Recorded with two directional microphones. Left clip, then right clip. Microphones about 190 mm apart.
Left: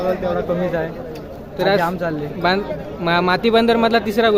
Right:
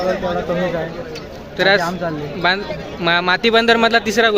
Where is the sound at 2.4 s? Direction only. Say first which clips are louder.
Right 1 dB; 5° left (ahead or behind).